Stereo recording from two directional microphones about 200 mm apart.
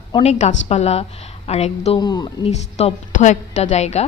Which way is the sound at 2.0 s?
20° left (ahead or behind).